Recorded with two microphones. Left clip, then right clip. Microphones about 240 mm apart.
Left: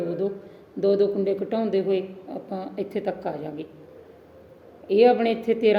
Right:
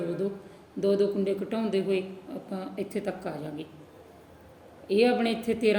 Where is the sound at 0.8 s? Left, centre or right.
Centre.